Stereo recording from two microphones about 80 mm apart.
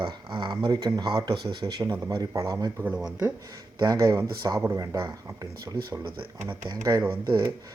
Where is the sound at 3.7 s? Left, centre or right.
Right.